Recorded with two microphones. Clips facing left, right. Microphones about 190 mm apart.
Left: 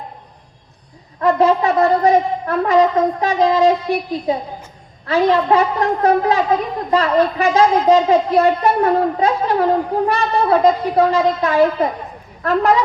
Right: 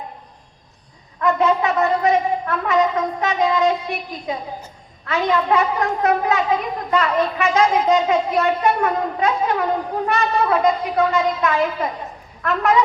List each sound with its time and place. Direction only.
1.2 s speech: 35° left (ahead or behind)